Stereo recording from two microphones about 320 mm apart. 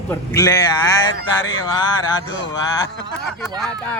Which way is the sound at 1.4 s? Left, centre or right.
Left.